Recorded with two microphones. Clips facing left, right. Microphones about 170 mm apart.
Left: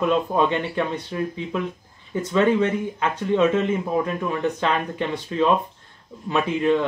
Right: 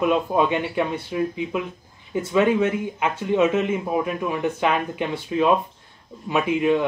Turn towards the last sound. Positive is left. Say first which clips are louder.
# even
turn(degrees=-15)  # may be behind; listen again after turning